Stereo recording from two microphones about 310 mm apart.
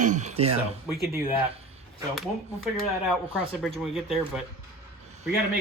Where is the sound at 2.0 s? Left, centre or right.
Centre.